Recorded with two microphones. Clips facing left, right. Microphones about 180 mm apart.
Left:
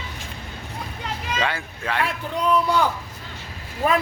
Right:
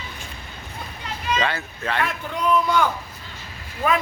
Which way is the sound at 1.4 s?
10° left (ahead or behind).